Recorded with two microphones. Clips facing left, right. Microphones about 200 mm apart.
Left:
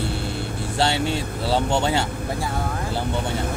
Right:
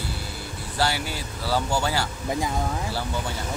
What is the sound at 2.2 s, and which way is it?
Speech, 15° right (ahead or behind).